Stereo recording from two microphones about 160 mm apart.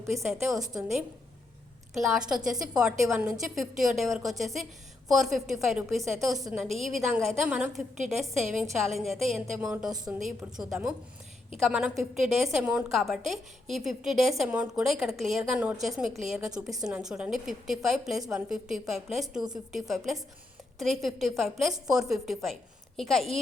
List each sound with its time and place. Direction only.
0.1 s a woman's voice: centre (ahead or behind)